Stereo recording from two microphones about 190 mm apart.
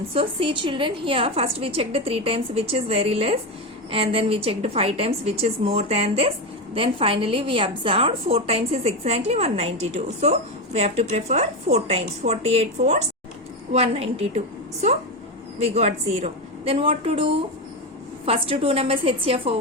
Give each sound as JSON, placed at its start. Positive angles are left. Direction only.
{"t": 0.1, "sound": "a woman's voice", "side_deg": -30}